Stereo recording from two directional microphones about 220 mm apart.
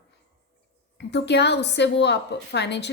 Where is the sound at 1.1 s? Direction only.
50° left (ahead or behind).